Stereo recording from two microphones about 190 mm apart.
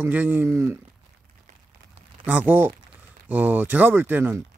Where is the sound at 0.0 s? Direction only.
10° right (ahead or behind).